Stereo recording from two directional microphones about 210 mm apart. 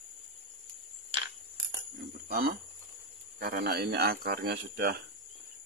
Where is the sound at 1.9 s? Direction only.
50° right (ahead or behind).